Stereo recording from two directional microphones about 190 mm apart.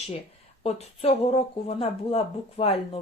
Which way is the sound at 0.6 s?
35° left (ahead or behind).